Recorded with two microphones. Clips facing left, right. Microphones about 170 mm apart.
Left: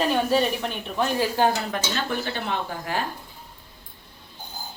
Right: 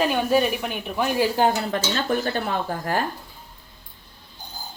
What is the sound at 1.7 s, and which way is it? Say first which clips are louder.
Speech: right 4 dB; 45° right (ahead or behind).